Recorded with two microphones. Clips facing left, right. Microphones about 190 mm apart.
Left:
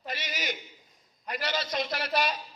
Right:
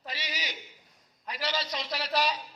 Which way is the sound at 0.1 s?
50° left (ahead or behind).